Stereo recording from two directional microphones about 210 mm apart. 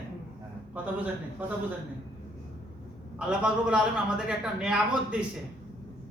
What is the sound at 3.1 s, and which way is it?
A man's voice, 5° right (ahead or behind).